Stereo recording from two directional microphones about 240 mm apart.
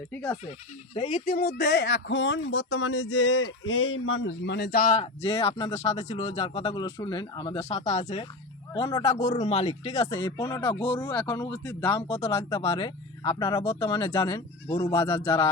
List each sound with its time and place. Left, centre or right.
0.1 s speech: centre
1.1 s speech: left; by 9.1 s centre
9.1 s speech: left
10.3 s speech: centre
12.0 s speech: left